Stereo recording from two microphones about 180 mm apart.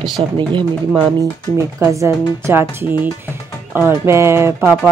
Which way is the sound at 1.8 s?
15° right (ahead or behind).